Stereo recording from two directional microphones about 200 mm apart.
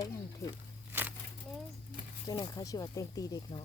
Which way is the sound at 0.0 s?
15° left (ahead or behind).